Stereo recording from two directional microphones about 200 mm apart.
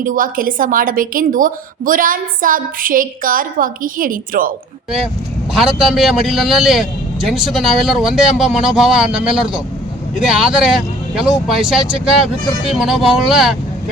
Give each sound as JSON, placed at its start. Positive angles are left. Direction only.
{"t": 0.0, "sound": "a woman's voice", "side_deg": -45}
{"t": 5.5, "sound": "a man's voice", "side_deg": 0}